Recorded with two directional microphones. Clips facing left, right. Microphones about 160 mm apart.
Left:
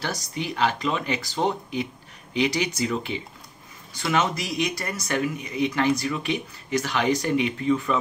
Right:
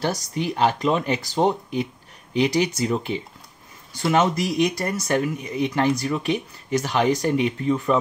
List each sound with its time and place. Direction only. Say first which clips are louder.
0.3 s speech: right 2 dB; 45° right (ahead or behind)